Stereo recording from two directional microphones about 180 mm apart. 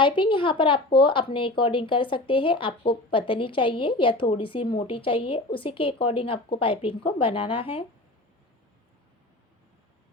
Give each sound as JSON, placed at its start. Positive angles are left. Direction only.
{"t": 0.0, "sound": "speech", "side_deg": 30}